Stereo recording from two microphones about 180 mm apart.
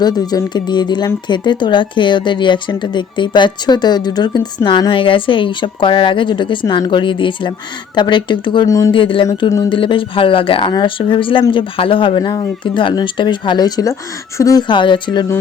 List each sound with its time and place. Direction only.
0.0 s speech: 20° left (ahead or behind)
8.9 s speech: 30° left (ahead or behind)